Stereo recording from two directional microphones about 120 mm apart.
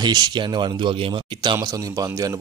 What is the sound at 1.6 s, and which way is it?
Speech, 30° right (ahead or behind).